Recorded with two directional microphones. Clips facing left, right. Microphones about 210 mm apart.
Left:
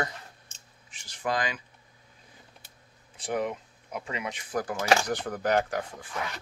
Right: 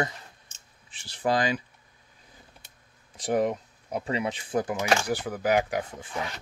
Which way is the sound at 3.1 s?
40° right (ahead or behind).